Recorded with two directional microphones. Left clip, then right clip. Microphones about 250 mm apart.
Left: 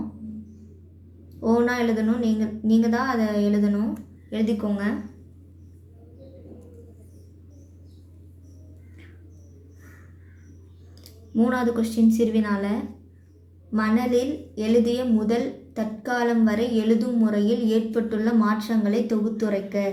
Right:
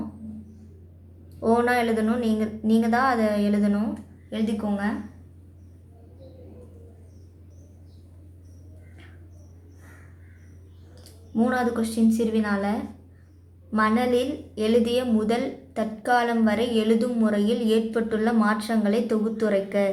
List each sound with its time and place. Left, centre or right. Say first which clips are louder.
1.4 s a woman's voice: right 1 dB; right
11.3 s a woman's voice: left 1 dB; centre